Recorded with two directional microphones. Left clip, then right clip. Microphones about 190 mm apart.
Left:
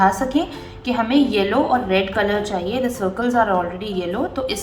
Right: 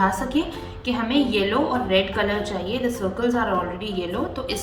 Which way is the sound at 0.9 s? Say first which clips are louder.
Left 4 dB; 30° left (ahead or behind).